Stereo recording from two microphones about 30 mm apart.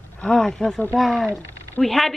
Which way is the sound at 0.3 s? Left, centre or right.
Centre.